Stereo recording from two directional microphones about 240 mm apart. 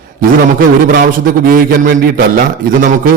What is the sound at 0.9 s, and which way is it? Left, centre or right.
A man's voice, right.